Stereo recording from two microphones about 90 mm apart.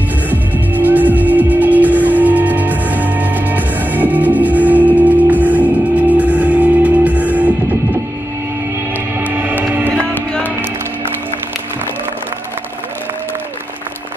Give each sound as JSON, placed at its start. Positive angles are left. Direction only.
{"t": 0.3, "sound": "music", "side_deg": -20}